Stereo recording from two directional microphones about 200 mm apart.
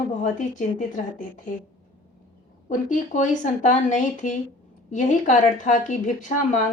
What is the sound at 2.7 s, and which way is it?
A woman's voice, 35° left (ahead or behind).